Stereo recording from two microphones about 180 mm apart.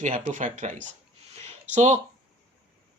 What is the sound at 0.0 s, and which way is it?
Speech, 45° right (ahead or behind).